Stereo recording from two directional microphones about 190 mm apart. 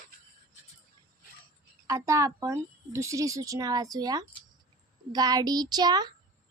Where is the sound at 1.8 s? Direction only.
15° right (ahead or behind).